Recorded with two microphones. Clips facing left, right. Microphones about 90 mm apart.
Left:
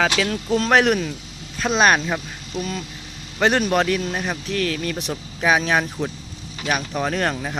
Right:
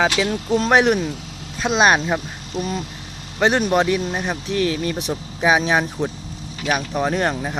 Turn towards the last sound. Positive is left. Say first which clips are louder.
# right 2 dB
turn(degrees=-15)  # may be behind; listen again after turning